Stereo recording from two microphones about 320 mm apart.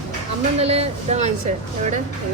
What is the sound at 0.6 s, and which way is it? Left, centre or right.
Speech, centre.